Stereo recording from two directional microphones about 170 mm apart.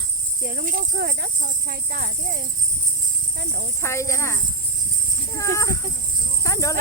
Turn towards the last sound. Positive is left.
turn(degrees=20)  # may be behind; listen again after turning